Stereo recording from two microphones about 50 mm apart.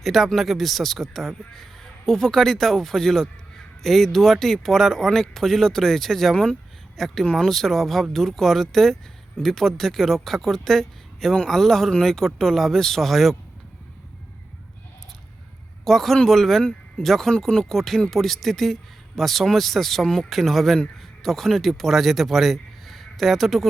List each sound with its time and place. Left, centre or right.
0.0 s a man's voice: centre
6.3 s a man's voice: centre
6.9 s a man's voice: centre
15.8 s a man's voice: centre